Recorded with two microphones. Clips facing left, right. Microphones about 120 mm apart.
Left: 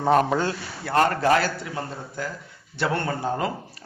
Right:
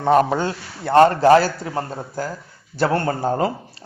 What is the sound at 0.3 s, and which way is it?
A man's voice, 20° right (ahead or behind).